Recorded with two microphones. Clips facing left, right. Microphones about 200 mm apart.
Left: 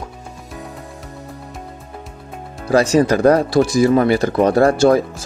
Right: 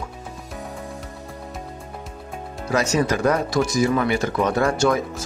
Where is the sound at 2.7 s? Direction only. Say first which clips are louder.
Left 7 dB; 30° left (ahead or behind).